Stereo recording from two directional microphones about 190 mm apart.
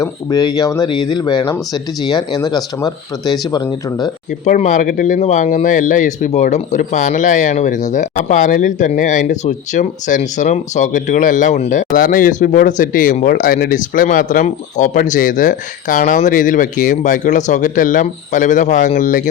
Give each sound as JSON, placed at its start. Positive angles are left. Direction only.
{"t": 0.0, "sound": "speech", "side_deg": 20}
{"t": 4.3, "sound": "speech", "side_deg": 40}